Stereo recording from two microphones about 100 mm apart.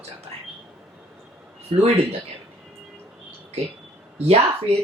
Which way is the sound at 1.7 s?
90° right.